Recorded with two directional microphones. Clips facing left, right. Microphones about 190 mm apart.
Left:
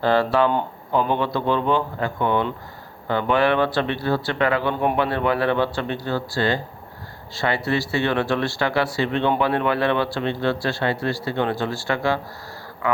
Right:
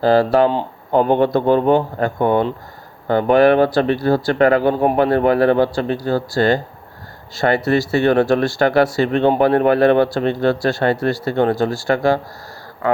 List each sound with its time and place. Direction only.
0.0 s speech: 35° right (ahead or behind)
0.9 s speech: 50° right (ahead or behind)